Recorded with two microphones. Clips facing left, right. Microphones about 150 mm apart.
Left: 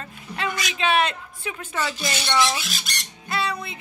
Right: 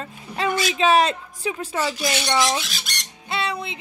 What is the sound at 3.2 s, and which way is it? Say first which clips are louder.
Squawk: right 1 dB; 25° right (ahead or behind).